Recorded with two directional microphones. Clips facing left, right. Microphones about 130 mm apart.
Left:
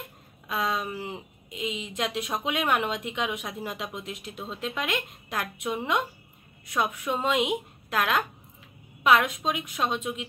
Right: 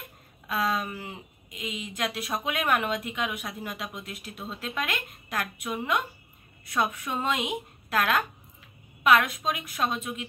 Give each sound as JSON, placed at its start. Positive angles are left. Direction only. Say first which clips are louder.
{"t": 0.5, "sound": "speech", "louder": "right 1 dB", "side_deg": 15}